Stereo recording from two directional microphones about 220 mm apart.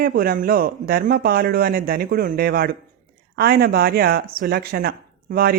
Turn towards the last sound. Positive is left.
turn(degrees=-45)  # may be behind; listen again after turning